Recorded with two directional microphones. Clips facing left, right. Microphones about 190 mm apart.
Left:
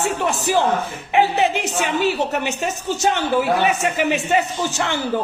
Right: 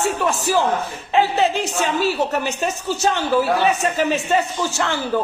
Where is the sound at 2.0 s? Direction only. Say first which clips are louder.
Left 1 dB; 20° left (ahead or behind).